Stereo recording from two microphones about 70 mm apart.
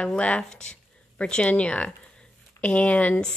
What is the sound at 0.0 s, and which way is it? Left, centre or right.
Speech, centre.